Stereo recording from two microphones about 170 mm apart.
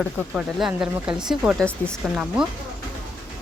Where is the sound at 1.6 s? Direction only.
5° left (ahead or behind).